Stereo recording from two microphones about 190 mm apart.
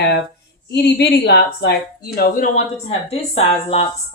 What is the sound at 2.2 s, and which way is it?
A woman's voice, 45° left (ahead or behind).